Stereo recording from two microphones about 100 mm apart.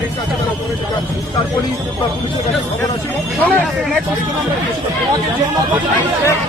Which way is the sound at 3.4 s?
15° left (ahead or behind).